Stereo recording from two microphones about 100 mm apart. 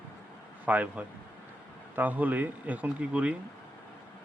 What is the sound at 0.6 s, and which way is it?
Speech, 15° right (ahead or behind).